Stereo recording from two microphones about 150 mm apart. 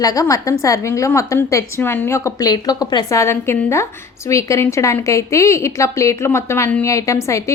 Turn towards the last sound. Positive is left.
turn(degrees=20)  # may be behind; listen again after turning